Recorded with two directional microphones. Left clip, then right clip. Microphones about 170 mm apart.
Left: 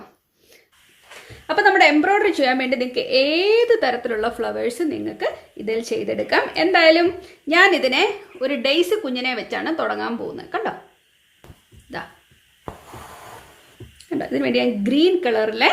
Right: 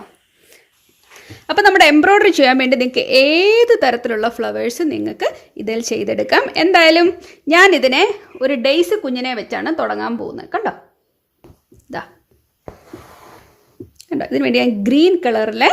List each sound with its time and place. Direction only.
1.5 s a woman's voice: 70° right (ahead or behind)
12.6 s a sound: centre (ahead or behind)
14.0 s a woman's voice: 65° right (ahead or behind)